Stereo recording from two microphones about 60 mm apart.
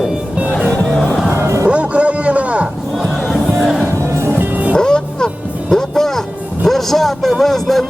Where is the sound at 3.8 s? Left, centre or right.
Right.